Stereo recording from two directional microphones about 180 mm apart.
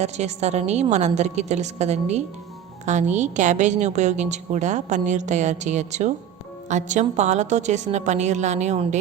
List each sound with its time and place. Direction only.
0.0 s a woman's voice: 40° right (ahead or behind)